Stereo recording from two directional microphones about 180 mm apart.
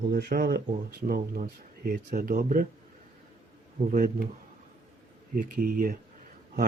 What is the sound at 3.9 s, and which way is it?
Speech, 45° right (ahead or behind).